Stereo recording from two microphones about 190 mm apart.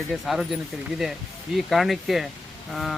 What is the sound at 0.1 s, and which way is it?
Speech, centre (ahead or behind).